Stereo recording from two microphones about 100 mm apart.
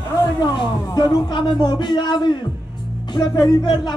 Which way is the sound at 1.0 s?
45° left (ahead or behind).